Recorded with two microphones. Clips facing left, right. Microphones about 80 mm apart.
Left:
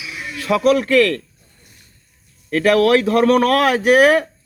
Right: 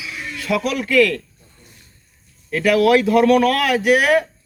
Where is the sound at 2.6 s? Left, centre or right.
Left.